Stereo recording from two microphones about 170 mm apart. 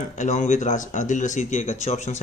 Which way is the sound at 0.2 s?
45° left (ahead or behind).